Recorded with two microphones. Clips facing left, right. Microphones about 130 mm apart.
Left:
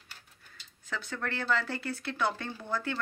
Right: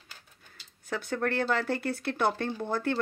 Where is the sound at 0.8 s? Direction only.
50° right (ahead or behind).